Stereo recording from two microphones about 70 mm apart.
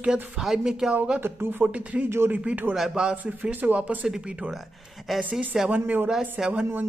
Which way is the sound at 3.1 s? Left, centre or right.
Right.